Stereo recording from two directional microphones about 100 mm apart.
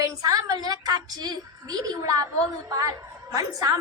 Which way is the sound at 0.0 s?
40° right (ahead or behind).